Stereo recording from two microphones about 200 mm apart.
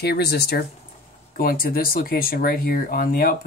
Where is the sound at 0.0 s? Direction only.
55° left (ahead or behind).